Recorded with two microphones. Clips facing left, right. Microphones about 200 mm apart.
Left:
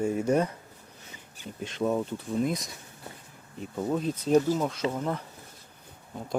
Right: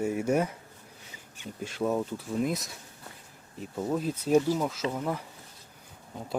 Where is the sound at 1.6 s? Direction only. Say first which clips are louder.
Left 1 dB; 5° right (ahead or behind).